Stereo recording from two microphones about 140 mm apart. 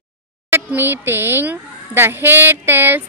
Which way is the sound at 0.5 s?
15° right (ahead or behind).